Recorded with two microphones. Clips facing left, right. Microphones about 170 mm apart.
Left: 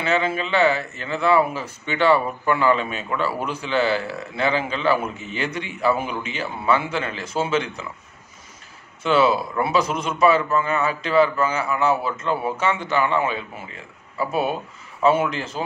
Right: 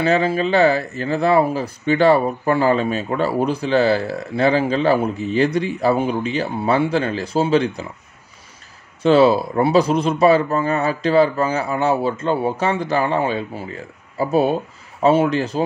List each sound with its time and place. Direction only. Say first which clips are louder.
0.0 s speech: right 5 dB; 35° right (ahead or behind)
9.0 s speech: right 6 dB; 35° right (ahead or behind)